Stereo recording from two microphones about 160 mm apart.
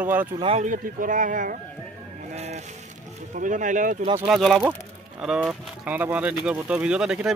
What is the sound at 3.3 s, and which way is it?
Speech, 55° right (ahead or behind).